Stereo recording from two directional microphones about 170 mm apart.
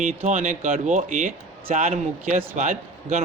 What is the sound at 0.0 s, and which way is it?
A man's voice, 45° right (ahead or behind).